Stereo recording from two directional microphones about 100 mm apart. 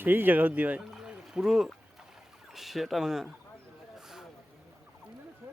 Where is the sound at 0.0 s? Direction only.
20° right (ahead or behind).